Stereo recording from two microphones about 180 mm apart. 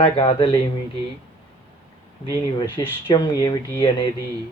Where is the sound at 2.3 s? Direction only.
25° left (ahead or behind).